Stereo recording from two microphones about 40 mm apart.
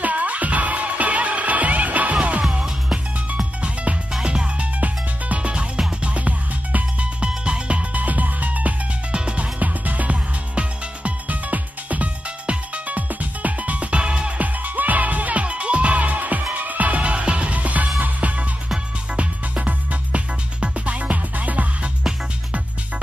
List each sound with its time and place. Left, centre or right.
0.0 s music: right
3.6 s music: right
4.7 s music: right
7.9 s music: right
9.1 s music: right
9.6 s music: right
10.5 s music: right
11.2 s music: right
14.4 s music: right